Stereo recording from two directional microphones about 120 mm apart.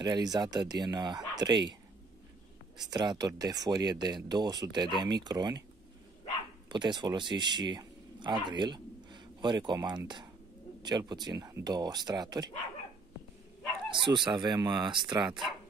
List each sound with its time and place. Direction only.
0.0 s speech: 35° right (ahead or behind)
2.8 s speech: 35° right (ahead or behind)
6.7 s speech: 40° right (ahead or behind)
14.0 s speech: 40° right (ahead or behind)